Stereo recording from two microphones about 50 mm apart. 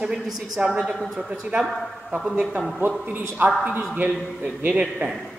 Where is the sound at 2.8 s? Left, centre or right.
Right.